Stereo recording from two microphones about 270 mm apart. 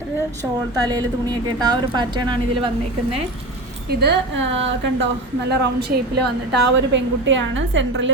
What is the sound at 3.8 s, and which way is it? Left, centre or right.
A woman's voice, right.